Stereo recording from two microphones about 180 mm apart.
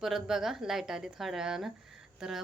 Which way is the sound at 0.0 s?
Centre (ahead or behind).